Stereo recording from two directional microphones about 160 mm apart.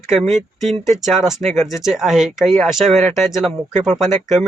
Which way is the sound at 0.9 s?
Centre (ahead or behind).